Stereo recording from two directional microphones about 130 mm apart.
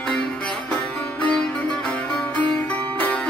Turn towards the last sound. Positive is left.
turn(degrees=10)  # may be behind; listen again after turning